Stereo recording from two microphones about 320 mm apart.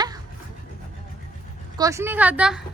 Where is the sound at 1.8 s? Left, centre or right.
Centre.